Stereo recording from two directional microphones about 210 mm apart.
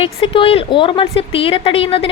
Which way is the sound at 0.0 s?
25° left (ahead or behind).